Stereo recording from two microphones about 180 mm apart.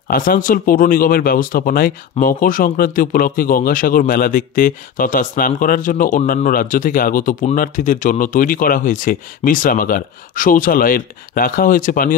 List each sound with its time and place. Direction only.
0.1 s speech: 50° left (ahead or behind)